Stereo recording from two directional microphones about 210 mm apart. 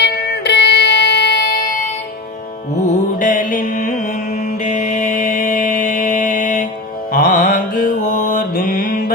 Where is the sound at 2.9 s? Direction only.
40° left (ahead or behind).